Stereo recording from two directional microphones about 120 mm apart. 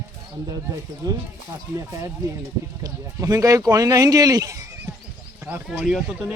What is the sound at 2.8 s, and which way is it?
Speech, 30° right (ahead or behind).